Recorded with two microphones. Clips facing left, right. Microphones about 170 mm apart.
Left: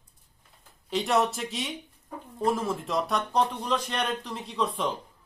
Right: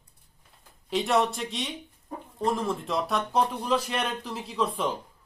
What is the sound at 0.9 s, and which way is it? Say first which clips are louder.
Speech: right 1 dB; centre (ahead or behind).